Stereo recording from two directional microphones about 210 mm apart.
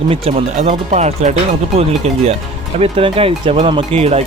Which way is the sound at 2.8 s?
25° right (ahead or behind).